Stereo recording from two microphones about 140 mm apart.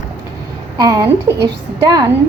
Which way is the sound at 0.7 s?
30° right (ahead or behind).